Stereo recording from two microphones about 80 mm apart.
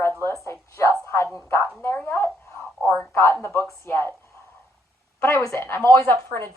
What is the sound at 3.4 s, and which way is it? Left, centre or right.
Speech, left.